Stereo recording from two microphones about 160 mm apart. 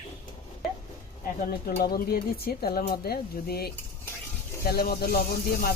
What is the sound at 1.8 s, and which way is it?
Speech, 75° left (ahead or behind).